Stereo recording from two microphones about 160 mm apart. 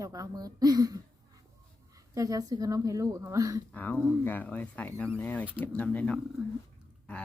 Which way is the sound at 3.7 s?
10° left (ahead or behind).